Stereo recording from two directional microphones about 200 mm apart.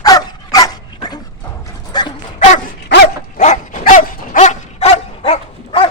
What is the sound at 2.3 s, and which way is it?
Dog, 40° left (ahead or behind).